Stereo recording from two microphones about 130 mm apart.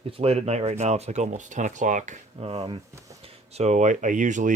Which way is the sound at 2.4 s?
45° right (ahead or behind).